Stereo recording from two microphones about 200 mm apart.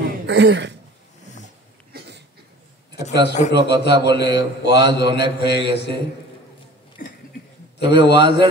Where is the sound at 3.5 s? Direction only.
55° left (ahead or behind).